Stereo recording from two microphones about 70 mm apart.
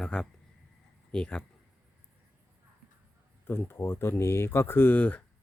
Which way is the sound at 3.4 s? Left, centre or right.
Left.